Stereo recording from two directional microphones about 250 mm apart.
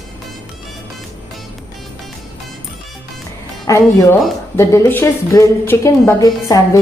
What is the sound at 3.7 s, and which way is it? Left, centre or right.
A woman's voice, centre.